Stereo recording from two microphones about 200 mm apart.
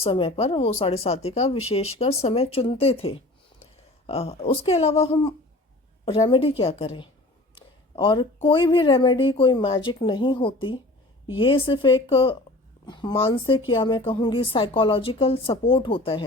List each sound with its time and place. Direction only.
0.0 s speech: 25° left (ahead or behind)